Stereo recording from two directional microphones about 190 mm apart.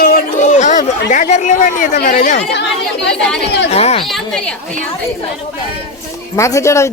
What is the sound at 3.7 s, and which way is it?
Speech, 35° left (ahead or behind).